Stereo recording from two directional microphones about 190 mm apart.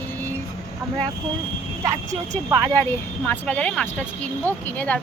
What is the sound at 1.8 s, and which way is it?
Speech, 15° right (ahead or behind).